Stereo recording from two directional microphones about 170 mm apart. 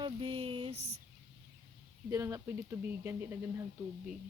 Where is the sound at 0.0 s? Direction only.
30° right (ahead or behind).